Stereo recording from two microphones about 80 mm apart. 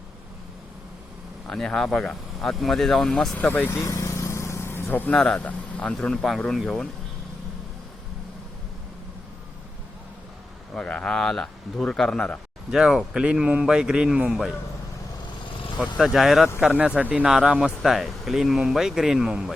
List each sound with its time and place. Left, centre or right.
1.5 s speech: centre
3.3 s speech: left
3.7 s vehicle: left
4.9 s speech: left
5.1 s speech: centre
5.4 s speech: centre
10.8 s speech: centre
12.7 s a man's voice: centre
16.0 s a man's voice: centre